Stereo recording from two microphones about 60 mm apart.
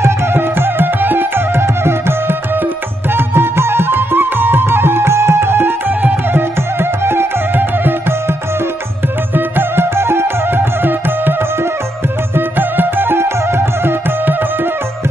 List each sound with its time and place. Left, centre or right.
0.0 s music: right
9.3 s music: right
12.4 s music: right